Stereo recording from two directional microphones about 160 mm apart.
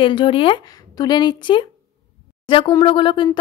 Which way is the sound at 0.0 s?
30° left (ahead or behind).